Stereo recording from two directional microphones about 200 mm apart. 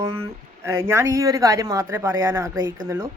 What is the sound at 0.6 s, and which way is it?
Speech, 15° right (ahead or behind).